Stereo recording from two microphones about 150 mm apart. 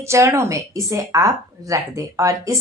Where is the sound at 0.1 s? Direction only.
20° right (ahead or behind).